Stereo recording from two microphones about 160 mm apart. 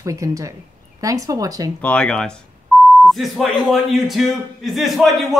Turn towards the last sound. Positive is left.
turn(degrees=0)  # may be behind; listen again after turning